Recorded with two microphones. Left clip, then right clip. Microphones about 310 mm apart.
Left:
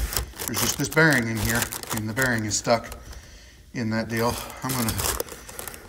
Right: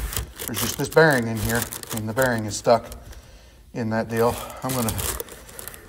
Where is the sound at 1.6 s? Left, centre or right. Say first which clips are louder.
Left 2 dB; centre.